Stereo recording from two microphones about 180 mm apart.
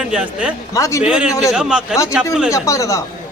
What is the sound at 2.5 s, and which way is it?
Speech, 15° left (ahead or behind).